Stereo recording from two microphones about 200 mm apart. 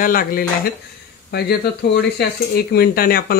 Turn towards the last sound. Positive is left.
turn(degrees=50)  # may be behind; listen again after turning